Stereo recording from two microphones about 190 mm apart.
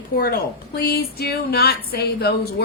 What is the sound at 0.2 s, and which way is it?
Speech, 50° left (ahead or behind).